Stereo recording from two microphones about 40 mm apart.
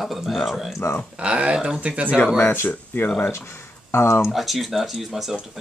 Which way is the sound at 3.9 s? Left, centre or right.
Left.